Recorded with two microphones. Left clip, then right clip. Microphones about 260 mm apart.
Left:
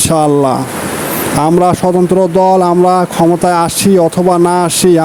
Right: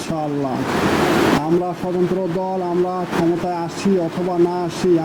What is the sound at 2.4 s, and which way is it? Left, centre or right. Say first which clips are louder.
Speech: left 13 dB; left.